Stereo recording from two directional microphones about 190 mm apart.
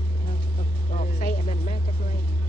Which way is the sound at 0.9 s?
45° left (ahead or behind).